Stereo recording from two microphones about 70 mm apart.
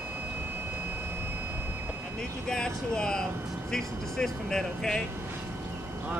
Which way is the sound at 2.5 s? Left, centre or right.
Centre.